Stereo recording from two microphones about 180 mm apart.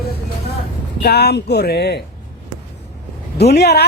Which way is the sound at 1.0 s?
65° left (ahead or behind).